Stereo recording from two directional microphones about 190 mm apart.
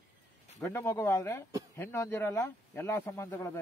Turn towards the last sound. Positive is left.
turn(degrees=15)  # may be behind; listen again after turning